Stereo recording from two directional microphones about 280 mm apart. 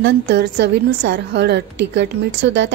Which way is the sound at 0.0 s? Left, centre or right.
Right.